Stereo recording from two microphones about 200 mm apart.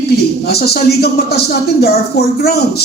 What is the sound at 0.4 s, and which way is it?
Speech, 55° left (ahead or behind).